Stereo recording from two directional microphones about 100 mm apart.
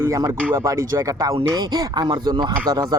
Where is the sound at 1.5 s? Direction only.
45° right (ahead or behind).